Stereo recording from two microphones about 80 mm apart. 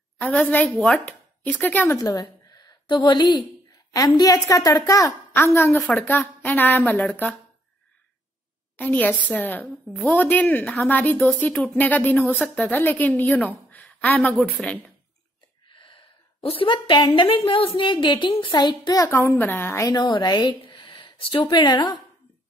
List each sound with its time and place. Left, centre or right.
0.2 s speech: left
2.0 s a sound: left
2.9 s a woman's voice: left
5.3 s a woman's voice: left
5.9 s speech: left
9.2 s speech: left
9.8 s a woman's voice: centre
10.1 s speech: left
15.7 s a sound: left
16.6 s a woman's voice: left
19.0 s speech: left
19.9 s a woman's voice: left